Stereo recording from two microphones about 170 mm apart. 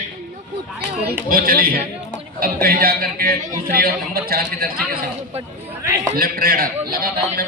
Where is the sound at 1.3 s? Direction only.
60° right (ahead or behind).